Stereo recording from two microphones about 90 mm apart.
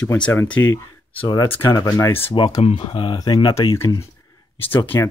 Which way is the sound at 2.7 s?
75° left (ahead or behind).